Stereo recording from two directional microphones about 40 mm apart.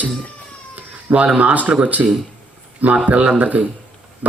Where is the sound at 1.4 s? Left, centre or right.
Right.